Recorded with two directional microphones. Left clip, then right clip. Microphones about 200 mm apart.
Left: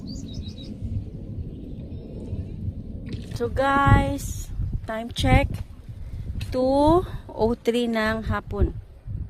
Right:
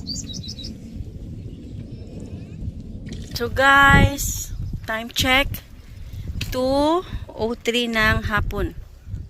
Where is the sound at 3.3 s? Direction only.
5° left (ahead or behind).